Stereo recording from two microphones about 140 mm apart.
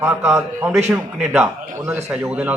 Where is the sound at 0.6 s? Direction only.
10° right (ahead or behind).